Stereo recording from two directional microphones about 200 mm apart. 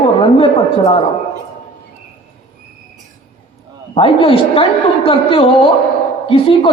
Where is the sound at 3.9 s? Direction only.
25° left (ahead or behind).